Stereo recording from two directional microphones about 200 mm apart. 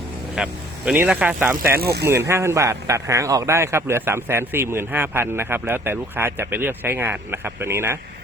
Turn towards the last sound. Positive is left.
turn(degrees=-10)  # may be behind; listen again after turning